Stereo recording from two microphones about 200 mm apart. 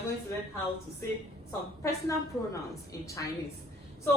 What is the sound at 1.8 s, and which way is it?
Speech, 15° left (ahead or behind).